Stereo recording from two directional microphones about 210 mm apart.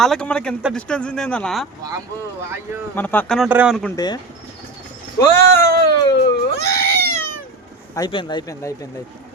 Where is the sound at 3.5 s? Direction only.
10° right (ahead or behind).